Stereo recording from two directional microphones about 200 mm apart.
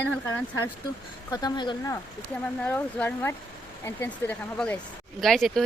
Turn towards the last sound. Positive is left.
turn(degrees=0)  # may be behind; listen again after turning